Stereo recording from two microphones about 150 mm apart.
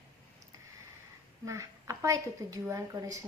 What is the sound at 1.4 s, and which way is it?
A woman's voice, 20° right (ahead or behind).